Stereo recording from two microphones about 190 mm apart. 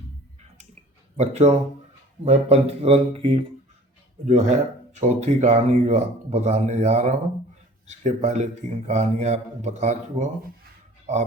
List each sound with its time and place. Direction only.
1.1 s speech: 35° right (ahead or behind)